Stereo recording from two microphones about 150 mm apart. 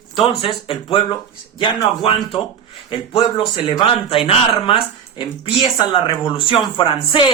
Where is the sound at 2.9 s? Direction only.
35° left (ahead or behind).